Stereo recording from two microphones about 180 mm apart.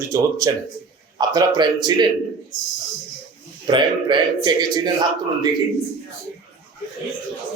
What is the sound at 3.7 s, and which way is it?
Speech, 25° right (ahead or behind).